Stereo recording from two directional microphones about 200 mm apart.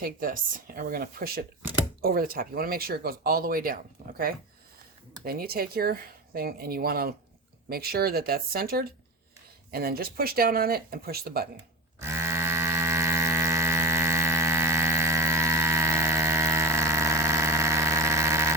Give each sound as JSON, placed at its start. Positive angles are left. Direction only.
{"t": 0.0, "sound": "speech", "side_deg": -45}
{"t": 5.2, "sound": "speech", "side_deg": -50}
{"t": 11.9, "sound": "a sound", "side_deg": -15}